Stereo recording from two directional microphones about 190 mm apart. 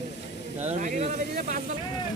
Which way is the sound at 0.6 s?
40° right (ahead or behind).